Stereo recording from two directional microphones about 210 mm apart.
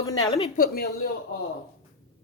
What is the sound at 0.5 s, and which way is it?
Speech, 45° left (ahead or behind).